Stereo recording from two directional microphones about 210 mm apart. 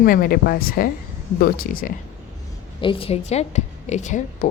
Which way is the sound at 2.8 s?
25° left (ahead or behind).